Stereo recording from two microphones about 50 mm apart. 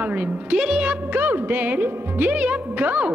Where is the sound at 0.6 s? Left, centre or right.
Centre.